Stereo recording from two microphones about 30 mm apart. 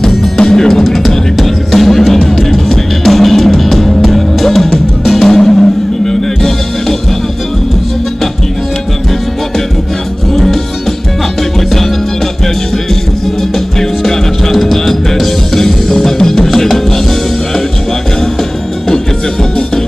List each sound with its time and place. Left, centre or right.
0.4 s music: left
10.3 s music: centre
13.4 s music: centre